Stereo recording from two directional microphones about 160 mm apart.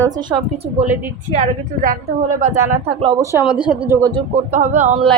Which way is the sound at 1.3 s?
50° right (ahead or behind).